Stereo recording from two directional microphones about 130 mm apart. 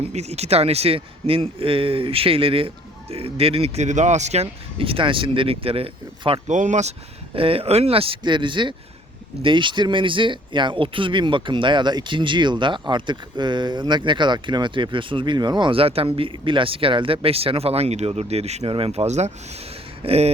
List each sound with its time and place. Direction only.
0.0 s a man's voice: 55° right (ahead or behind)
6.5 s speech: 70° right (ahead or behind)
7.3 s a man's voice: 45° right (ahead or behind)